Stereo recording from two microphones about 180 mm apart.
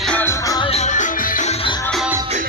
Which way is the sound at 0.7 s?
40° left (ahead or behind).